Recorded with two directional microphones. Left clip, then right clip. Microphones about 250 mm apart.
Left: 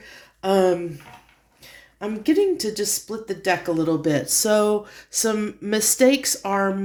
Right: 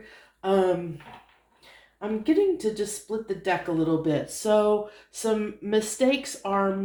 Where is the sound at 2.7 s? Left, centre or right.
Left.